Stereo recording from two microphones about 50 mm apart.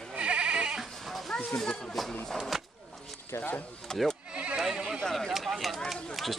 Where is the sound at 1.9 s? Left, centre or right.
Centre.